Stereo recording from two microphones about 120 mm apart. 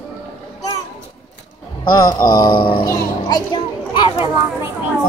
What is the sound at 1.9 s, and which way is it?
Speech, 35° left (ahead or behind).